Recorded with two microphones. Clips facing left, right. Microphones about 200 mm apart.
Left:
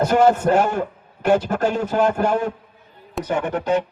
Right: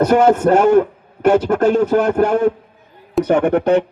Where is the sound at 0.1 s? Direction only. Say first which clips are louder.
Right 1 dB; 60° right (ahead or behind).